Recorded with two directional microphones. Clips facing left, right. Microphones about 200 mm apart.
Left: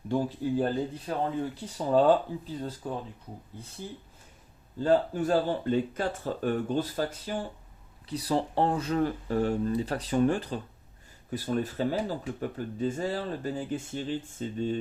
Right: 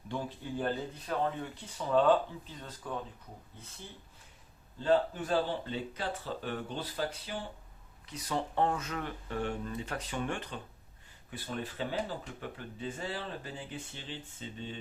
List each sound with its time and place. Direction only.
0.1 s speech: 40° left (ahead or behind)
4.8 s speech: 40° left (ahead or behind)
8.0 s speech: 35° left (ahead or behind)